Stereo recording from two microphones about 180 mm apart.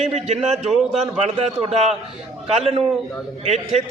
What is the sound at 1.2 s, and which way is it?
Speech, 35° right (ahead or behind).